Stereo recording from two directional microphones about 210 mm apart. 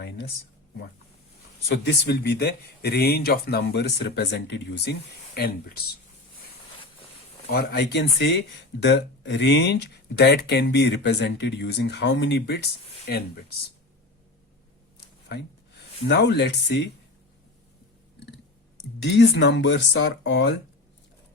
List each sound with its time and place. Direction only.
1.7 s speech: 50° left (ahead or behind)
7.5 s speech: 55° left (ahead or behind)
16.0 s speech: 55° left (ahead or behind)
19.0 s speech: 55° left (ahead or behind)